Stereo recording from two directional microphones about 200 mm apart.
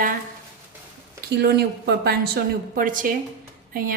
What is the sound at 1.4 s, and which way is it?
A woman's voice, 55° right (ahead or behind).